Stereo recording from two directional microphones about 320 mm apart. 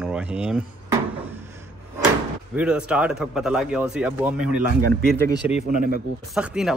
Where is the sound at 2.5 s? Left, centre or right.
Centre.